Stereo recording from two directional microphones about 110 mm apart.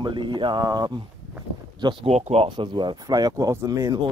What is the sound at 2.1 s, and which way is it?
Speech, 80° right.